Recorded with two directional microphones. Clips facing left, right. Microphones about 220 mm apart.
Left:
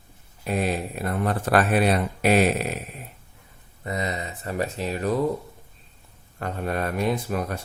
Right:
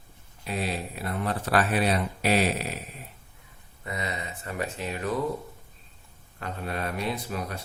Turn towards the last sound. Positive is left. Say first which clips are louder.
# left 6 dB
turn(degrees=50)  # may be behind; listen again after turning